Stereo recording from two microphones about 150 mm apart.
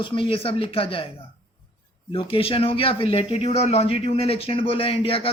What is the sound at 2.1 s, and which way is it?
A man's voice, 35° left (ahead or behind).